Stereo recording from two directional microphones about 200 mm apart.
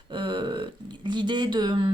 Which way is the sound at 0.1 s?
25° right (ahead or behind).